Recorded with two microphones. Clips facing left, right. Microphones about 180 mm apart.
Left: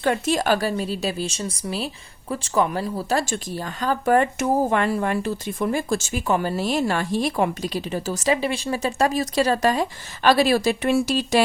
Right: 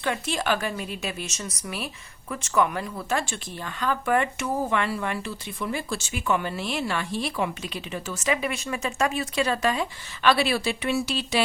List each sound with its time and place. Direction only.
0.0 s speech: 40° left (ahead or behind)